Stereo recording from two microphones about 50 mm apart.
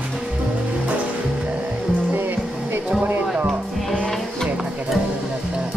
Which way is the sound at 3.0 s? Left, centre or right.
Right.